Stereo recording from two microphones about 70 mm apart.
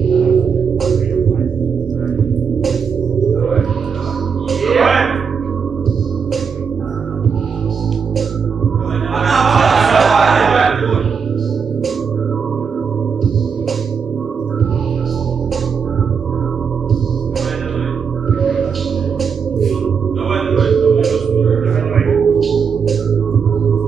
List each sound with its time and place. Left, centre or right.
0.1 s music: centre
4.5 s music: centre
9.1 s music: centre
19.6 s music: centre